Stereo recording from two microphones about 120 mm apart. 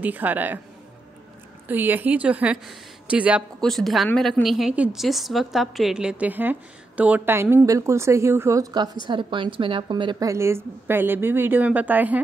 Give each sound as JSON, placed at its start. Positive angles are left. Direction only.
{"t": 0.0, "sound": "speech", "side_deg": -15}
{"t": 1.7, "sound": "speech", "side_deg": -15}
{"t": 3.6, "sound": "a woman's voice", "side_deg": 0}
{"t": 10.1, "sound": "speech", "side_deg": -25}